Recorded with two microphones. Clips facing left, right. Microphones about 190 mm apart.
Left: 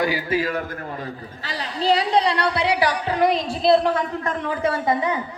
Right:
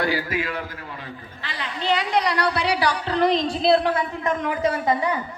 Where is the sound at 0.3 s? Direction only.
35° left (ahead or behind); by 4.0 s centre (ahead or behind).